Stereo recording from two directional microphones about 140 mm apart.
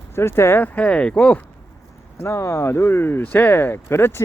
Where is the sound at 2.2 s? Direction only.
20° left (ahead or behind).